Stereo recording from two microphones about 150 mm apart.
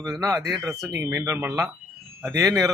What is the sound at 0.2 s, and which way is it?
Speech, 20° right (ahead or behind).